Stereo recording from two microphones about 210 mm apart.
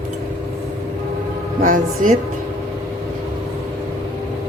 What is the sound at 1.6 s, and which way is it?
Speech, 40° right (ahead or behind).